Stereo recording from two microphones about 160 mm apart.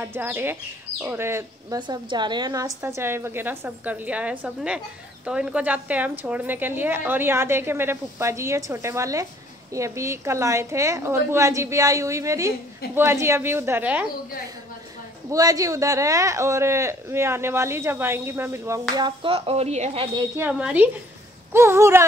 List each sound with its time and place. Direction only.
0.0 s a woman's voice: 15° right (ahead or behind)
1.8 s a woman's voice: 30° right (ahead or behind); by 14.0 s 10° right (ahead or behind)
15.3 s speech: 20° right (ahead or behind); by 20.1 s 40° right (ahead or behind)
20.3 s a woman's voice: 10° right (ahead or behind)